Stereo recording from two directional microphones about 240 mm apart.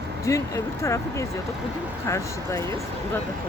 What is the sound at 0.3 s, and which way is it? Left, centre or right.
Speech, centre.